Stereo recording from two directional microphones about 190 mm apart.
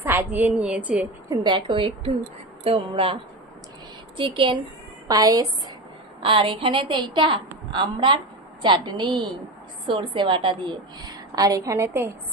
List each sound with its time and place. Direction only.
0.0 s a woman's voice: 10° right (ahead or behind)
1.5 s a woman's voice: 25° right (ahead or behind)
4.2 s a woman's voice: 25° right (ahead or behind)